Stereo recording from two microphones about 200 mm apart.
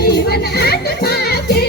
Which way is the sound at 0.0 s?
55° left (ahead or behind).